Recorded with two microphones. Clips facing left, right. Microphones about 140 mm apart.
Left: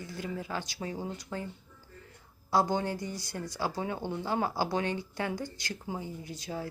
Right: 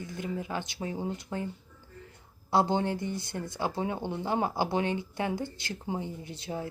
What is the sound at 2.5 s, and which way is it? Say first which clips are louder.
Speech: right 2 dB; 25° right (ahead or behind).